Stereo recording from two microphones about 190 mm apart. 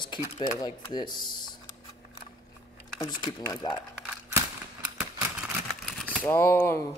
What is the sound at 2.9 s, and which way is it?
Speech, 20° left (ahead or behind).